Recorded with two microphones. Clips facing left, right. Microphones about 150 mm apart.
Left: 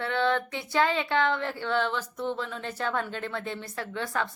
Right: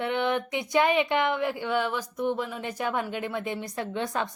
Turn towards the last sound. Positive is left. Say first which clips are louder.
# right 2 dB
turn(degrees=-20)  # may be behind; listen again after turning